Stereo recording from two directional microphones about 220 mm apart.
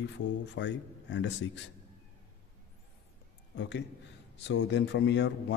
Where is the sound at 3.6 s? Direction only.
55° left (ahead or behind).